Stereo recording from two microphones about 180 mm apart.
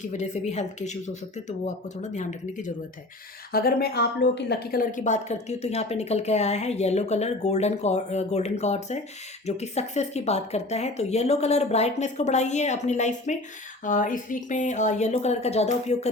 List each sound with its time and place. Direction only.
0.0 s speech: 40° left (ahead or behind)
3.5 s speech: 55° left (ahead or behind); by 16.0 s 35° left (ahead or behind)